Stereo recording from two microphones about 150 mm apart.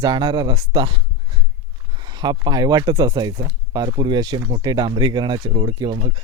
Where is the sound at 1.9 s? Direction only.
30° right (ahead or behind).